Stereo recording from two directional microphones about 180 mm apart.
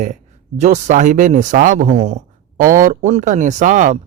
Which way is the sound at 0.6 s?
40° right (ahead or behind).